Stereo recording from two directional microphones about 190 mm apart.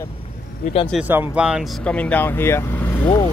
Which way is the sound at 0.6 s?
30° left (ahead or behind).